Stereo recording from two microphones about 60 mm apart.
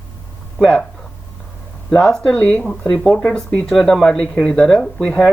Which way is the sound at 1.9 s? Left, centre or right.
Centre.